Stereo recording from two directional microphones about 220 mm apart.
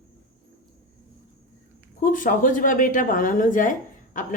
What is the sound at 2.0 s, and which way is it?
Speech, 40° left (ahead or behind).